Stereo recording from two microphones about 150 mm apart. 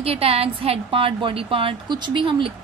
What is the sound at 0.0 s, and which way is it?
A woman's voice, 40° right (ahead or behind).